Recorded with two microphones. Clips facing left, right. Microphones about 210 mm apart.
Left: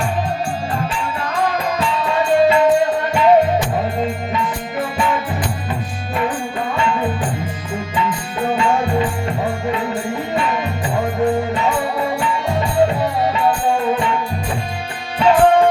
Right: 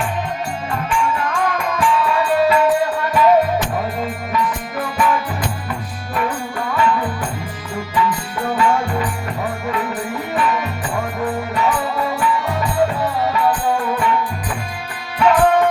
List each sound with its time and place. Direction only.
0.7 s music: 30° left (ahead or behind)
4.8 s music: 25° left (ahead or behind)
6.7 s music: 25° left (ahead or behind)
15.2 s music: 25° left (ahead or behind)